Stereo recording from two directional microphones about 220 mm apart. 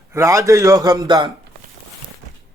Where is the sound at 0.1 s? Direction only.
15° right (ahead or behind).